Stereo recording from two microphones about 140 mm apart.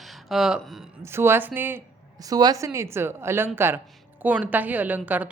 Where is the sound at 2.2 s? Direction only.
25° right (ahead or behind).